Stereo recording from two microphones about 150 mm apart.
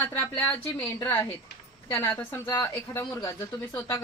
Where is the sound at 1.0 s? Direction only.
15° left (ahead or behind).